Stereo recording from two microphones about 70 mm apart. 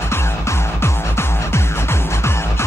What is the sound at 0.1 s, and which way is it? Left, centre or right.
Music, left.